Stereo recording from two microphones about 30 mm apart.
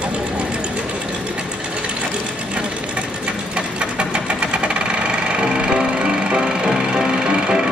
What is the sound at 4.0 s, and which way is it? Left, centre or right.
Engine, right.